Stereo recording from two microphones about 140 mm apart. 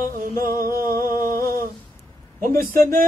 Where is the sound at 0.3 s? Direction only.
90° right.